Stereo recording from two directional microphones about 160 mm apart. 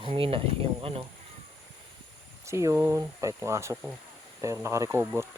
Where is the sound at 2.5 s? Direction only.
20° right (ahead or behind).